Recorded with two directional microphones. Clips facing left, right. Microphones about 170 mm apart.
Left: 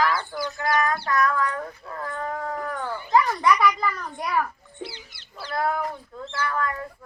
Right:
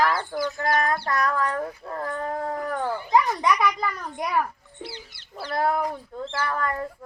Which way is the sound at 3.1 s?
15° right (ahead or behind).